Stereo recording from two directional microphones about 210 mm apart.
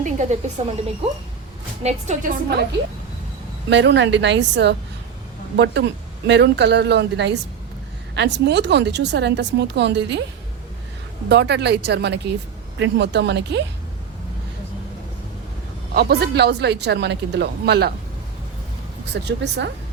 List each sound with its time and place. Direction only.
0.0 s speech: 35° right (ahead or behind)
1.8 s a woman's voice: 30° right (ahead or behind)
3.7 s speech: 55° right (ahead or behind)
11.3 s speech: 55° right (ahead or behind)
16.0 s speech: 50° right (ahead or behind)
19.1 s speech: 55° right (ahead or behind)